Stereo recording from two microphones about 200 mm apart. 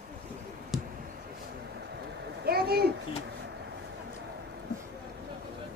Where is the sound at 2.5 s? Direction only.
50° right (ahead or behind).